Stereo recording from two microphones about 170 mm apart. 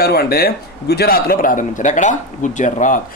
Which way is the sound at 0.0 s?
65° left (ahead or behind).